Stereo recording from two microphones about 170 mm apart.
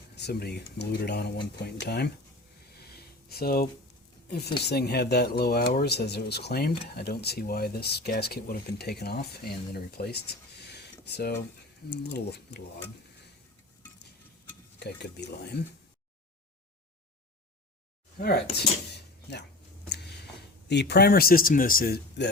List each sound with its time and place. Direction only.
0.2 s speech: 75° left (ahead or behind)
3.2 s speech: 65° left (ahead or behind)
10.7 s a sound: 80° left
11.9 s speech: 80° left
14.8 s speech: 75° left (ahead or behind)
18.5 s a sound: 75° left (ahead or behind)
20.7 s speech: 80° left; by 22.3 s 65° left (ahead or behind)